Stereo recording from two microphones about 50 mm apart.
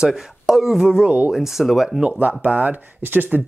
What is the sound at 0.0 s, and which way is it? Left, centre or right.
Speech, centre.